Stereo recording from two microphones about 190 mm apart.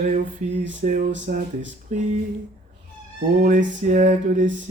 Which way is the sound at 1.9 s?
35° right (ahead or behind).